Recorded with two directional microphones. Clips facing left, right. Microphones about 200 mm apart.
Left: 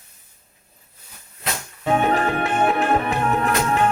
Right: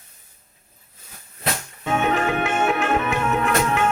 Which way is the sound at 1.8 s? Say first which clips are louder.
Left 2 dB; 35° left (ahead or behind).